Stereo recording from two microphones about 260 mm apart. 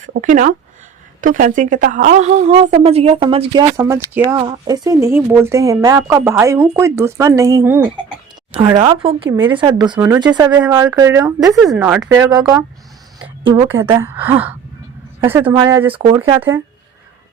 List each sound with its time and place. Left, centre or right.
0.0 s a woman's voice: right